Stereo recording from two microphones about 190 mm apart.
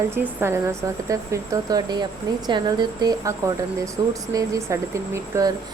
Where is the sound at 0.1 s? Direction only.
10° right (ahead or behind).